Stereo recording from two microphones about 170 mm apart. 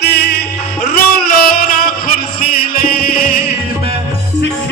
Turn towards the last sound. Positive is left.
turn(degrees=60)  # may be behind; listen again after turning